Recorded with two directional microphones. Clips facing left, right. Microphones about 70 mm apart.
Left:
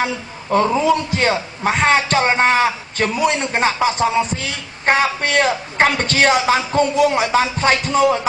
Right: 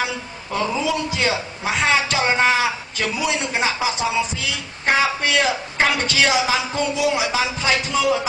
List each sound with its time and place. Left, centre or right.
0.0 s a man's voice: left